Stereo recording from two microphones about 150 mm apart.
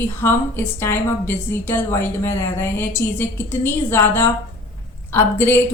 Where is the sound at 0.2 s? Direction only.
15° left (ahead or behind).